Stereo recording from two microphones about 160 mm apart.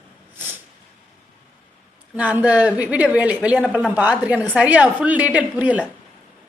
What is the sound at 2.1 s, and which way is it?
A woman's voice, 10° right (ahead or behind).